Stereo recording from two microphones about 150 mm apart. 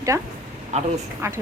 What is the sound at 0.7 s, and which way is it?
Speech, 50° right (ahead or behind).